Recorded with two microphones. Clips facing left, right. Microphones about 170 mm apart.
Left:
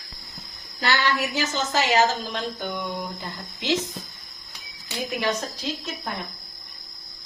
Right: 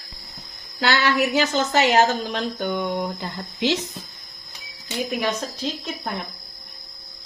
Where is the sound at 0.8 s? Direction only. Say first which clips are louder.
Right 4 dB; 75° right (ahead or behind).